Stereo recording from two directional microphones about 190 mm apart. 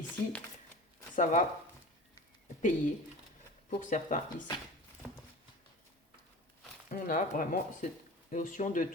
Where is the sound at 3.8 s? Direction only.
40° left (ahead or behind).